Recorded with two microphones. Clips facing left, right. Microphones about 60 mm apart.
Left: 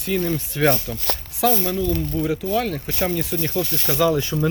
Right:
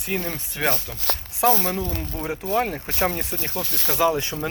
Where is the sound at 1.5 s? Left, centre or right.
Right.